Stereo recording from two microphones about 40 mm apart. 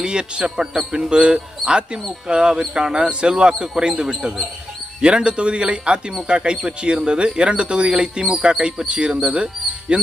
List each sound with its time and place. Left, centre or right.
0.0 s speech: right